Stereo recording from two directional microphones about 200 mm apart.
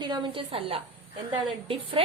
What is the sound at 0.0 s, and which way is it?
A woman's voice, 20° right (ahead or behind).